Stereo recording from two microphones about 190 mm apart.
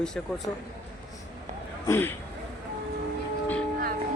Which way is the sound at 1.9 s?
10° left (ahead or behind).